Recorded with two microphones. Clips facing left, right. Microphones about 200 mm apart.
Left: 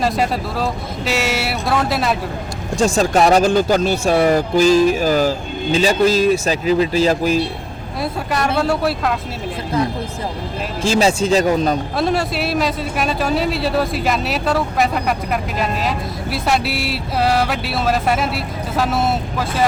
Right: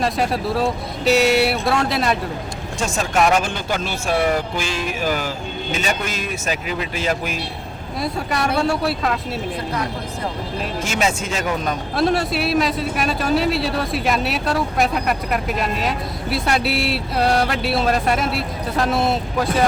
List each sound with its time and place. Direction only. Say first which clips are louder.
0.0 s speech: left 1 dB; centre (ahead or behind)
2.7 s speech: left 6 dB; 35° left (ahead or behind)
8.0 s speech: left 2 dB; centre (ahead or behind)
10.8 s speech: left 9 dB; 30° left (ahead or behind)
11.9 s speech: even; centre (ahead or behind)